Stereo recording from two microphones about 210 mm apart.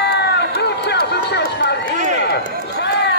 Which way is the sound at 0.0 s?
55° left (ahead or behind).